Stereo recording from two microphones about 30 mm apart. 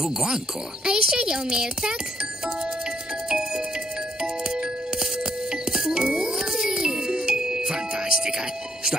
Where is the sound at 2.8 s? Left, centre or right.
Right.